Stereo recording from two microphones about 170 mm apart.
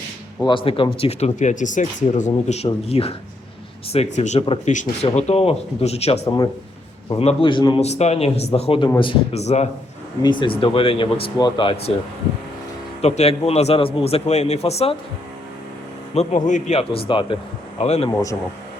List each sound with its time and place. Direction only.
0.4 s speech: 30° left (ahead or behind)
6.2 s speech: 25° left (ahead or behind); by 9.6 s 40° left (ahead or behind)
10.2 s speech: 30° left (ahead or behind)
13.0 s speech: 40° left (ahead or behind)
16.1 s speech: 45° left (ahead or behind)